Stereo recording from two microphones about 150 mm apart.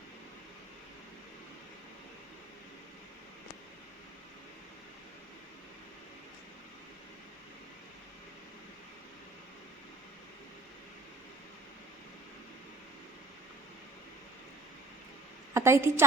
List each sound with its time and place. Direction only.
15.5 s a woman's voice: 20° right (ahead or behind)